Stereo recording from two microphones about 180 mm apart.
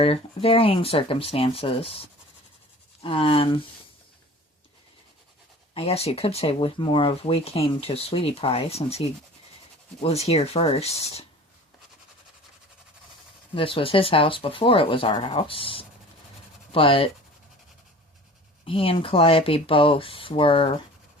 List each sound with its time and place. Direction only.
0.0 s speech: 30° left (ahead or behind)
5.7 s speech: 35° left (ahead or behind)
13.6 s speech: 30° left (ahead or behind)
18.6 s speech: 30° left (ahead or behind)